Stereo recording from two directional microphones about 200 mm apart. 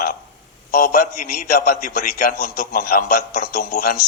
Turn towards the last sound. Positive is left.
turn(degrees=50)  # may be behind; listen again after turning